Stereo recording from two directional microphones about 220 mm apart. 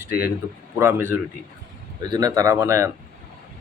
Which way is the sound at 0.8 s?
10° right (ahead or behind).